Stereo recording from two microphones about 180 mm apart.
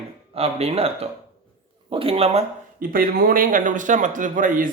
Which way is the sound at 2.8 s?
50° right (ahead or behind).